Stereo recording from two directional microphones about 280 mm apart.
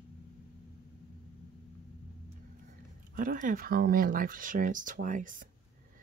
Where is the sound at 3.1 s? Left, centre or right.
Right.